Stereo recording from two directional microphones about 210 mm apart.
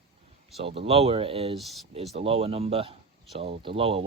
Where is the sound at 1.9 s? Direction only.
30° right (ahead or behind).